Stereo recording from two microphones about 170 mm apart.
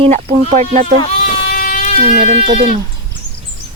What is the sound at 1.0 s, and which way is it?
Sheep, 45° left (ahead or behind).